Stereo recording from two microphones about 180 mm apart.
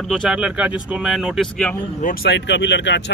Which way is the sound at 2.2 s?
80° left.